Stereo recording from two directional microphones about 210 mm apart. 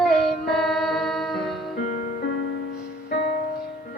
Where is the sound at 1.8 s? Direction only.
40° left (ahead or behind).